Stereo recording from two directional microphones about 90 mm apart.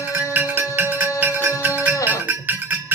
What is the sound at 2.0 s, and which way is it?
Cowbell, 20° right (ahead or behind).